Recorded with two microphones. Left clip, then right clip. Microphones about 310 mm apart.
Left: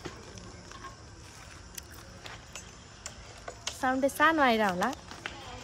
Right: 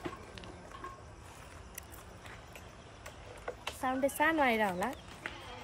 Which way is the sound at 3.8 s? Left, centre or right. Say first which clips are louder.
Left 5 dB; centre.